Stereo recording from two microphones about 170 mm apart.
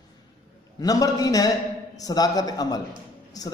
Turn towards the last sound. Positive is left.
turn(degrees=20)  # may be behind; listen again after turning